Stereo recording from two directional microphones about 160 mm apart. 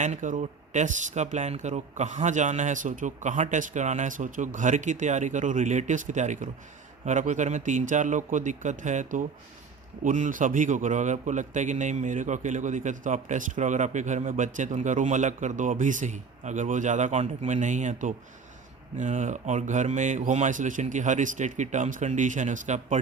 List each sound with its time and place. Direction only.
0.0 s a man's voice: 50° right (ahead or behind)